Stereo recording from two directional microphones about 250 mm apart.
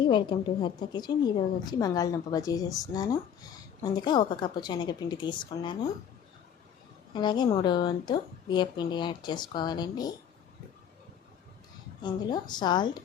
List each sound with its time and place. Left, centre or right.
0.0 s a woman's voice: centre
7.1 s a woman's voice: centre
12.0 s a woman's voice: centre